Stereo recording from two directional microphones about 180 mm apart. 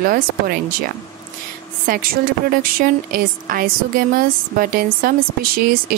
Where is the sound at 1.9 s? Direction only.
50° right (ahead or behind).